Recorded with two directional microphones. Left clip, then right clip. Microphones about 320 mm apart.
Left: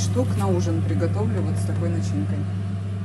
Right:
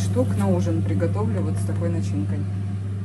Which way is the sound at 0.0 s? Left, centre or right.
Centre.